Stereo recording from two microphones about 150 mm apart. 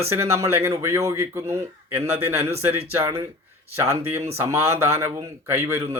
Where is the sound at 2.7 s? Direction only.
40° right (ahead or behind).